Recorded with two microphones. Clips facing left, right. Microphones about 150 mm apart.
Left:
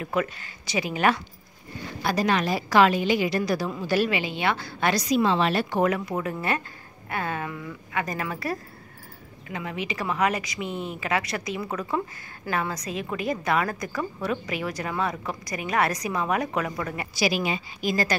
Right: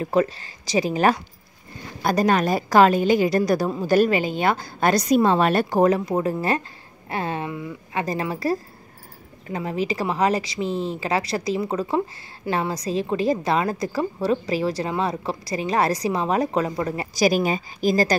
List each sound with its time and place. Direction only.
0.0 s a woman's voice: 35° right (ahead or behind)